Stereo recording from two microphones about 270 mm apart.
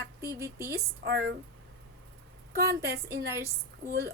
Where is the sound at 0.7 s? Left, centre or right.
Right.